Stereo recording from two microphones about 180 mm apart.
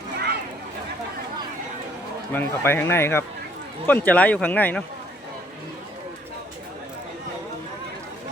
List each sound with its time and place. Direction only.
2.3 s speech: 10° left (ahead or behind)